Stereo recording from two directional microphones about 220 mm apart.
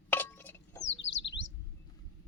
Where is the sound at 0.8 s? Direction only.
55° left (ahead or behind).